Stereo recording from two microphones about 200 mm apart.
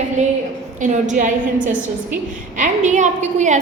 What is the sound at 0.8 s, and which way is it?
Speech, 40° right (ahead or behind).